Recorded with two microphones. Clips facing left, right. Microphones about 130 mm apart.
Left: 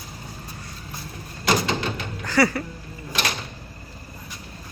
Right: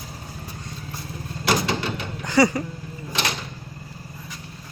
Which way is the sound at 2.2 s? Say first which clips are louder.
Right 2 dB; 15° right (ahead or behind).